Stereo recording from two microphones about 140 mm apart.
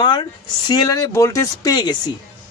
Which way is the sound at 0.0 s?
35° left (ahead or behind).